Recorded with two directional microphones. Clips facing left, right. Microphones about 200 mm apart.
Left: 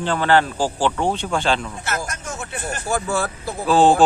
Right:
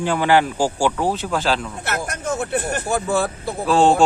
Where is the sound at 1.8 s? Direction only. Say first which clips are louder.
Right 3 dB; 60° right (ahead or behind).